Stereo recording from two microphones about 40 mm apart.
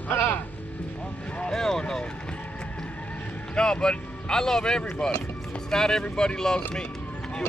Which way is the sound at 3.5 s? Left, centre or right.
Left.